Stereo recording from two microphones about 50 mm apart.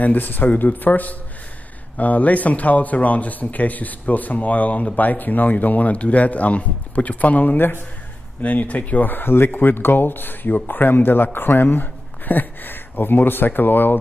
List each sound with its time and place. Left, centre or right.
0.0 s speech: left
7.5 s speech: left
8.4 s speech: left